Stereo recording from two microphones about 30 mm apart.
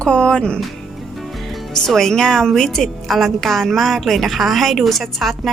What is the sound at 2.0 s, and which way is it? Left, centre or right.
Speech, centre.